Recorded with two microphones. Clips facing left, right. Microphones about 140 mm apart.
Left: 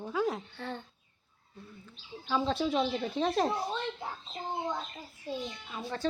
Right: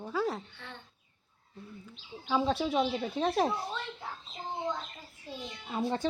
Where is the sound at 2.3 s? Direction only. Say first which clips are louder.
Right 1 dB; 5° right (ahead or behind).